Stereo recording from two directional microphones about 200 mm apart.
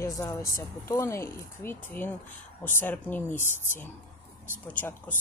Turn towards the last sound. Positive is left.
turn(degrees=10)  # may be behind; listen again after turning